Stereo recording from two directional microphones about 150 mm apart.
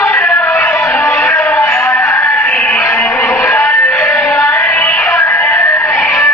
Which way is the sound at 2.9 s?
15° left (ahead or behind).